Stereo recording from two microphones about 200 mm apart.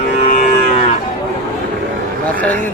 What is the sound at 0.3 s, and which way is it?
Livestock, 35° left (ahead or behind).